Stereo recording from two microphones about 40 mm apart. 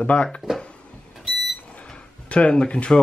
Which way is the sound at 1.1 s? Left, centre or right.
Centre.